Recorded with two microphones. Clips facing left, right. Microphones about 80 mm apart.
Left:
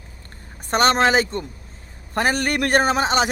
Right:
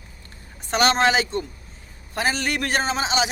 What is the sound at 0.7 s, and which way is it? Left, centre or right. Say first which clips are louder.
A man's voice: left 2 dB; left.